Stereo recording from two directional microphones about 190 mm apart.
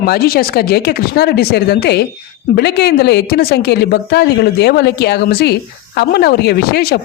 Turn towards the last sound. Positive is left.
turn(degrees=55)  # may be behind; listen again after turning